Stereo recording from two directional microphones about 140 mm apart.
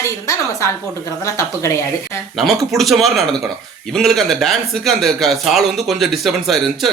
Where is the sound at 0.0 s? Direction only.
20° left (ahead or behind).